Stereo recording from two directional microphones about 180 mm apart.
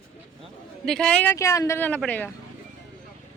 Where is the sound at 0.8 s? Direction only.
5° left (ahead or behind).